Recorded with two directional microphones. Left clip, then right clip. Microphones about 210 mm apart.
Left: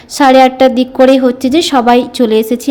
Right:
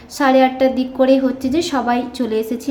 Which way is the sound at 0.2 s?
35° left (ahead or behind).